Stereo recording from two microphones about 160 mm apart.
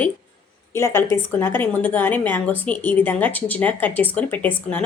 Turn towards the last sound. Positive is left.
turn(degrees=10)  # may be behind; listen again after turning